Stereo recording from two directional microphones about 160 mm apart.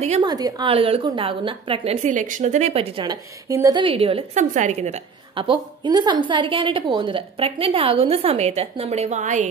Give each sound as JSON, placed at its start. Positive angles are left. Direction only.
{"t": 0.2, "sound": "a woman's voice", "side_deg": -25}
{"t": 2.0, "sound": "speech", "side_deg": -50}
{"t": 3.1, "sound": "a woman's voice", "side_deg": -20}
{"t": 3.8, "sound": "a woman's voice", "side_deg": -35}